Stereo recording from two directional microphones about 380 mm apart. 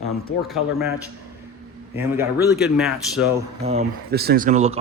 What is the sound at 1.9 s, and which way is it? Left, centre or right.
Speech, centre.